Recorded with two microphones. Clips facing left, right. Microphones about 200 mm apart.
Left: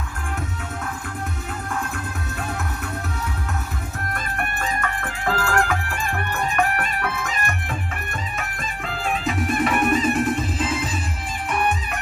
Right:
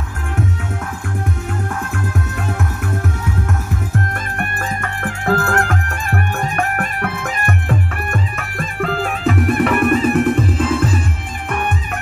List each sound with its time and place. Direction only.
4.1 s music: 45° right (ahead or behind)